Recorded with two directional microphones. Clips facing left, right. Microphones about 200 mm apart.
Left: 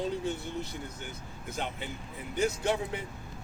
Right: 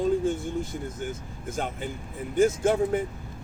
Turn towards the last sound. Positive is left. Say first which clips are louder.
# right 8 dB
turn(degrees=-45)  # may be behind; listen again after turning